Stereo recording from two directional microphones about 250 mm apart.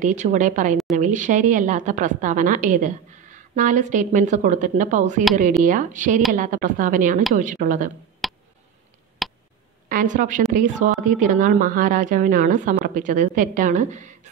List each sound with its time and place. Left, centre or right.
0.0 s a woman's voice: right
8.2 s a sound: centre
9.8 s a woman's voice: right